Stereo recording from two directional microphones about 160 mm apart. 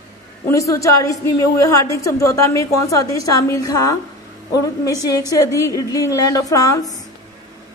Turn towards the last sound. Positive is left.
turn(degrees=20)  # may be behind; listen again after turning